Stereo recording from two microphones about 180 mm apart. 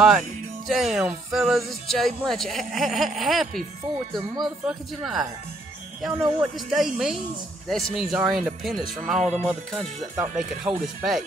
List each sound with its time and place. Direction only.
0.7 s speech: centre (ahead or behind)